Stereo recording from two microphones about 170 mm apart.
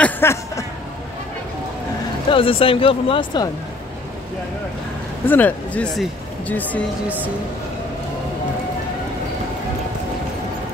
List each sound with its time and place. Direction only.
0.0 s a sound: 15° left (ahead or behind)
2.2 s speech: 30° left (ahead or behind)
5.2 s speech: 10° left (ahead or behind)